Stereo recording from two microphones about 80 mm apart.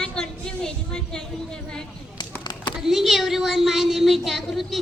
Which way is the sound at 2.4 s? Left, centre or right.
Left.